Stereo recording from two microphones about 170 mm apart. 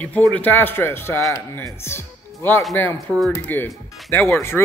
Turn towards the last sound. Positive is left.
turn(degrees=15)  # may be behind; listen again after turning